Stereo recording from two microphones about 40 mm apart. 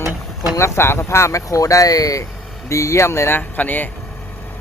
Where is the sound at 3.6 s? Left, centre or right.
Left.